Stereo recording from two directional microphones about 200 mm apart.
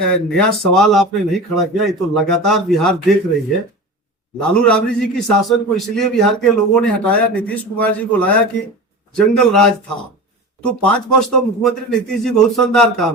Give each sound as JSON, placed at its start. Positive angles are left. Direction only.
{"t": 0.0, "sound": "a man's voice", "side_deg": 5}
{"t": 4.5, "sound": "a man's voice", "side_deg": 5}